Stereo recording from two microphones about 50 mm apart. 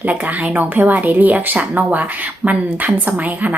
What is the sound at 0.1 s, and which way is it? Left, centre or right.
Speech, right.